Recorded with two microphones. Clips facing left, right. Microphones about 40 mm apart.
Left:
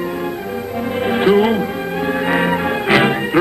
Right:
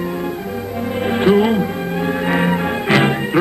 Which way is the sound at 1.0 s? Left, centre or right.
Centre.